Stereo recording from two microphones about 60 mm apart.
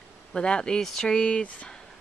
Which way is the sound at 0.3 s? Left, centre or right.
Centre.